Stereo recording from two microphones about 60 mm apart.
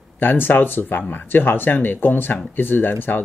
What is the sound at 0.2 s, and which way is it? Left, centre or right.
Speech, left.